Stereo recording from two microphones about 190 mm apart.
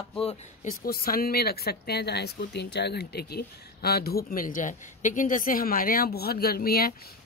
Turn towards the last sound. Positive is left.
turn(degrees=50)  # may be behind; listen again after turning